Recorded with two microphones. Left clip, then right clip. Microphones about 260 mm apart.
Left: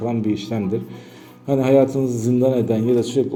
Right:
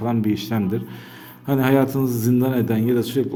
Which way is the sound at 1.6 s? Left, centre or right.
Right.